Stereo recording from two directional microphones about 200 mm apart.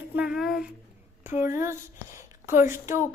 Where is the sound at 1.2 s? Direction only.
10° right (ahead or behind).